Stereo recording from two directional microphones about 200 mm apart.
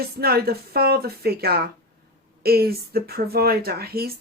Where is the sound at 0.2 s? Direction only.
50° right (ahead or behind).